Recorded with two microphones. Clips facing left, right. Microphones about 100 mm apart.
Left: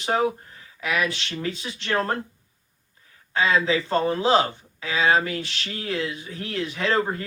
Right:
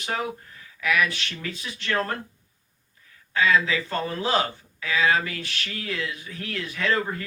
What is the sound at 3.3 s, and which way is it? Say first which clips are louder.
Speech: left 1 dB; 30° left (ahead or behind).